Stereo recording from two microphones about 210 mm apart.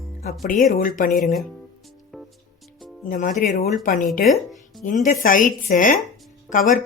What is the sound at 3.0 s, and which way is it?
Speech, 40° left (ahead or behind).